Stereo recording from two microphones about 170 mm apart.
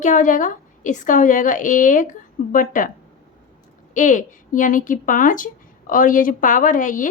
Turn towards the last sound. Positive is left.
turn(degrees=50)  # may be behind; listen again after turning